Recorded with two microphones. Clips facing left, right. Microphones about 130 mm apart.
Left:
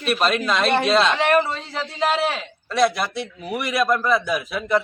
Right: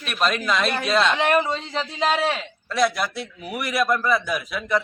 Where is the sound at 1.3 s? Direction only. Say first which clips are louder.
Left 2 dB; 15° right (ahead or behind).